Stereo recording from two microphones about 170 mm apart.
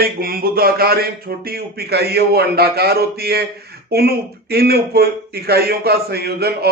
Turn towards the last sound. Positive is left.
turn(degrees=-70)  # may be behind; listen again after turning